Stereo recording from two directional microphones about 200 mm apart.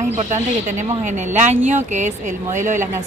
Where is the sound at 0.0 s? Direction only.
35° right (ahead or behind).